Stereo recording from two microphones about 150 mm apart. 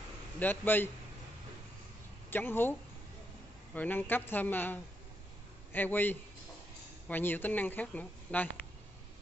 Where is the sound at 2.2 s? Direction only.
15° left (ahead or behind).